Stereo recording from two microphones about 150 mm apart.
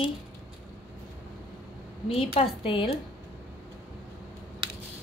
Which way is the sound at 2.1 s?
40° left (ahead or behind).